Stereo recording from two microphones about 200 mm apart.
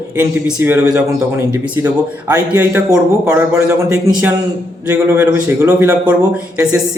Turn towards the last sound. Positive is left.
turn(degrees=-5)  # may be behind; listen again after turning